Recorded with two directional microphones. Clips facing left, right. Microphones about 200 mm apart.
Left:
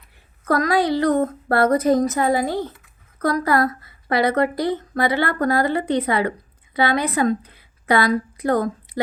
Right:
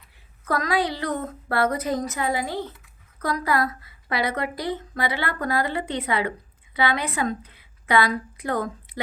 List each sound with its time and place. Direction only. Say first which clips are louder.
0.4 s a woman's voice: left 5 dB; 45° left (ahead or behind)